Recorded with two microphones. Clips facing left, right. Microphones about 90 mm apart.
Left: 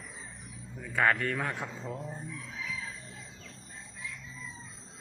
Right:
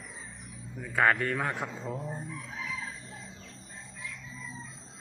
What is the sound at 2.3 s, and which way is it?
Fowl, 40° right (ahead or behind).